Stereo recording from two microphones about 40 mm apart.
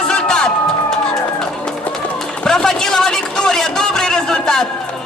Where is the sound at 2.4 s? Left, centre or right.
Left.